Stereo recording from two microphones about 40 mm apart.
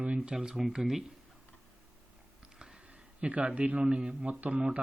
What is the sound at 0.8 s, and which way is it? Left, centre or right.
Speech, centre.